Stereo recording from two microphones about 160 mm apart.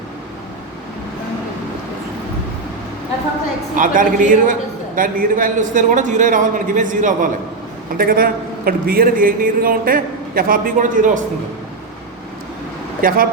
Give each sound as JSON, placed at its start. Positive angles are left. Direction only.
{"t": 3.8, "sound": "a man's voice", "side_deg": -55}
{"t": 13.0, "sound": "speech", "side_deg": -65}